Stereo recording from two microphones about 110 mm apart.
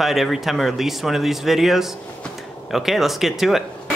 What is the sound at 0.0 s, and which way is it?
Speech, centre (ahead or behind).